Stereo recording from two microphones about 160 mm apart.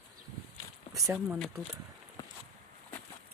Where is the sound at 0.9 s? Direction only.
5° right (ahead or behind).